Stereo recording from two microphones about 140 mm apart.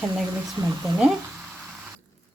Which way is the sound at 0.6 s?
15° right (ahead or behind).